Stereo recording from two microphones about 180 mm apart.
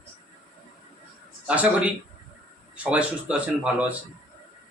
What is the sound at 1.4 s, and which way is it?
A man's voice, 10° right (ahead or behind).